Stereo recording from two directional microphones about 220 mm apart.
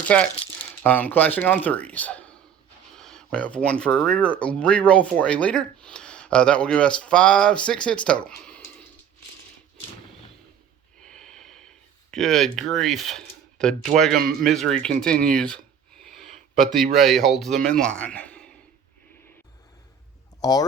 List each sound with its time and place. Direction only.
0.1 s speech: 5° left (ahead or behind)
11.0 s snort: 5° left (ahead or behind)
12.1 s speech: centre (ahead or behind)
20.4 s speech: 15° left (ahead or behind)